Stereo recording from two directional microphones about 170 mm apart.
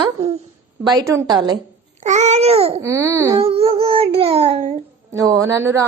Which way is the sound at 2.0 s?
40° right (ahead or behind).